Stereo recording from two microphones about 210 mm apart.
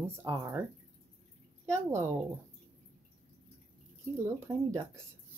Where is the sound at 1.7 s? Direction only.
15° right (ahead or behind).